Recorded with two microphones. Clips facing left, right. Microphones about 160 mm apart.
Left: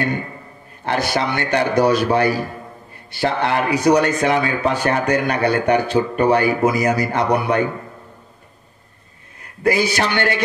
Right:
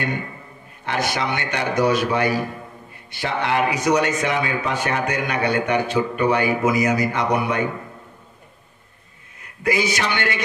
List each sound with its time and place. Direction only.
0.8 s a man's voice: 35° left (ahead or behind)
9.6 s a man's voice: 35° left (ahead or behind)